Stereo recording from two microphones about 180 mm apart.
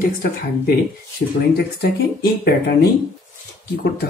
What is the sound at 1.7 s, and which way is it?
Speech, 60° left (ahead or behind).